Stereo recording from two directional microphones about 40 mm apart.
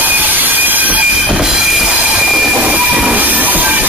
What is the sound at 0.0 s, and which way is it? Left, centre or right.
Train, right.